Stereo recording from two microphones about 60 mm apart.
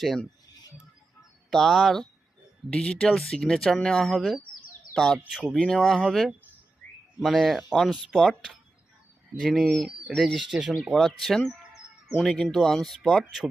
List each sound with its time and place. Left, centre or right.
1.5 s speech: centre
2.6 s speech: centre
5.4 s speech: centre
5.6 s speech: centre
8.1 s speech: centre
9.4 s speech: centre
9.6 s speech: centre
10.3 s speech: centre
10.9 s speech: centre